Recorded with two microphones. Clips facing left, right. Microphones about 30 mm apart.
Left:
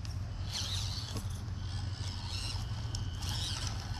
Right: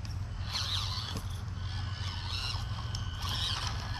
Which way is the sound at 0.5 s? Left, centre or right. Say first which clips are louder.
Right 5 dB; right.